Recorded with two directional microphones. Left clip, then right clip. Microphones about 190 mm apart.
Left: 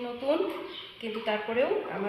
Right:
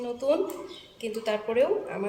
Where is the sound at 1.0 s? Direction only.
25° right (ahead or behind).